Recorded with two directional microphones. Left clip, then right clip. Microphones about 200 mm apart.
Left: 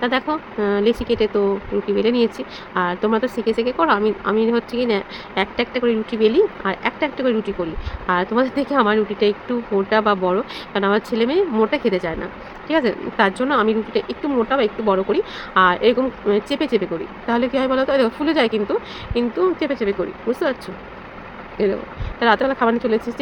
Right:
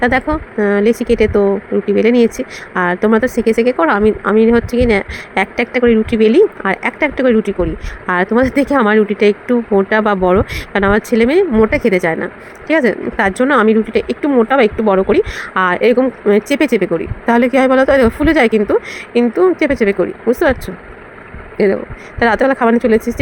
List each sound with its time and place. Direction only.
0.0 s speech: 30° right (ahead or behind)
22.2 s speech: 30° right (ahead or behind)